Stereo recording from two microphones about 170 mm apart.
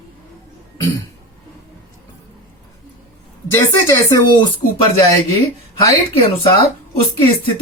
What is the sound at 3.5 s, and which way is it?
Speech, 15° left (ahead or behind).